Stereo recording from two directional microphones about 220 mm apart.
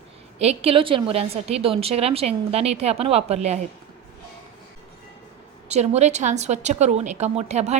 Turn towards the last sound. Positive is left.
turn(degrees=-30)  # may be behind; listen again after turning